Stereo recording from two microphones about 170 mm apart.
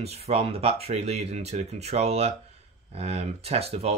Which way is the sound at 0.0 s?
35° right (ahead or behind).